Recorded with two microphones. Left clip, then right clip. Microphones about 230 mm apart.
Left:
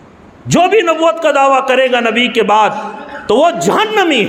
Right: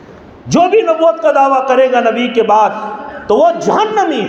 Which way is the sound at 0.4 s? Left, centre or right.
Left.